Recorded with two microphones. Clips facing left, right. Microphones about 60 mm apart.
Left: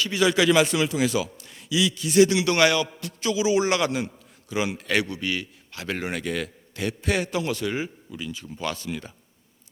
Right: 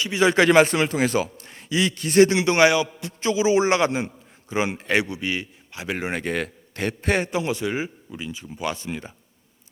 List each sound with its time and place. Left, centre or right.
0.0 s a man's voice: right
0.3 s a man's voice: right
7.3 s a man's voice: right